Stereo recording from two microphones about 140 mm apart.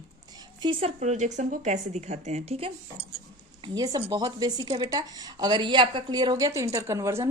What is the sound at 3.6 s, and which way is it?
Speech, 30° right (ahead or behind).